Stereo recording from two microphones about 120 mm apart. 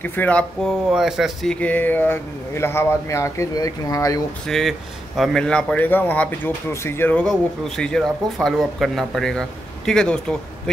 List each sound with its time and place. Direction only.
0.0 s speech: 15° left (ahead or behind)
0.9 s speech: 5° right (ahead or behind)
1.5 s speech: 10° left (ahead or behind); by 4.2 s 30° left (ahead or behind)
4.5 s speech: centre (ahead or behind); by 7.2 s 15° left (ahead or behind)
7.2 s speech: 5° left (ahead or behind)